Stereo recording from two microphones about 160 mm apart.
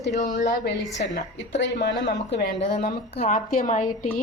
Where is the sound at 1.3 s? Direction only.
90° left.